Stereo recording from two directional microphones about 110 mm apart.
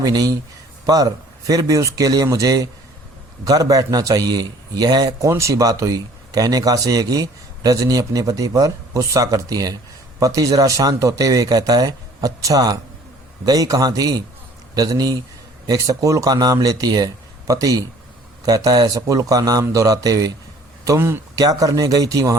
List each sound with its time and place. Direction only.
0.0 s a man's voice: 35° right (ahead or behind)